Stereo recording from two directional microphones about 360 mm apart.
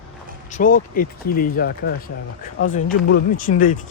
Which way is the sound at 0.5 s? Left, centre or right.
Left.